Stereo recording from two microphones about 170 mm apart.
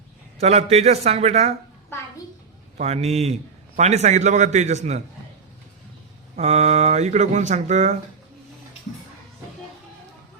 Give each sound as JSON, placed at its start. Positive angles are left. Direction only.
{"t": 0.3, "sound": "speech", "side_deg": -40}
{"t": 2.7, "sound": "a man's voice", "side_deg": -40}
{"t": 6.3, "sound": "speech", "side_deg": -40}